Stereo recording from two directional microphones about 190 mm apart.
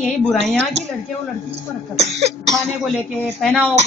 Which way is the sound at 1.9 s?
35° right (ahead or behind).